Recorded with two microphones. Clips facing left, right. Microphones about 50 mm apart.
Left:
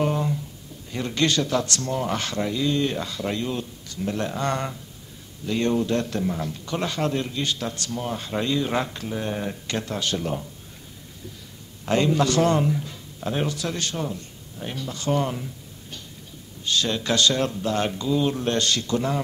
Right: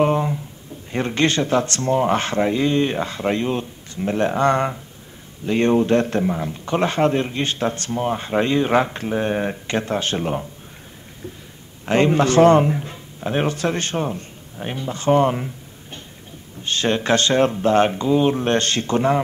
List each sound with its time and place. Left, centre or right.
0.0 s speech: right
11.8 s a man's voice: right